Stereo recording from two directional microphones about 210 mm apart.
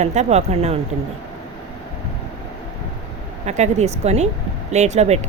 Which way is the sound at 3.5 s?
35° right (ahead or behind).